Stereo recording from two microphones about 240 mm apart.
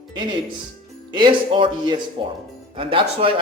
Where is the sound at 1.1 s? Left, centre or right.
Centre.